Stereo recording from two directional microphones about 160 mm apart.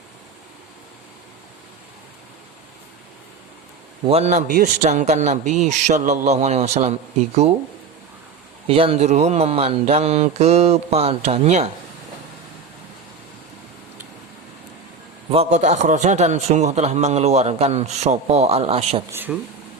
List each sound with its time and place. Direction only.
4.0 s a man's voice: 40° right (ahead or behind)
8.6 s a man's voice: 35° right (ahead or behind)
15.3 s a man's voice: 40° right (ahead or behind)
19.1 s speech: 10° right (ahead or behind)